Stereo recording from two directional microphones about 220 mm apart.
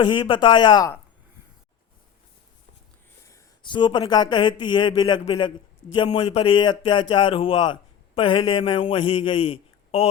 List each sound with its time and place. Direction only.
0.0 s speech: 20° left (ahead or behind)
3.2 s speech: 15° left (ahead or behind)